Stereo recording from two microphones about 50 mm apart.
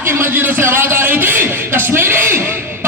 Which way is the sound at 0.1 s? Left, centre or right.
Right.